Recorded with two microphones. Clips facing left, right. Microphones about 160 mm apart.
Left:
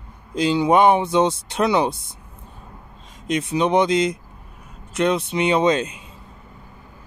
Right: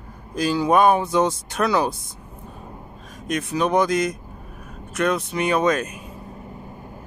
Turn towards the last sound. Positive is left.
turn(degrees=25)  # may be behind; listen again after turning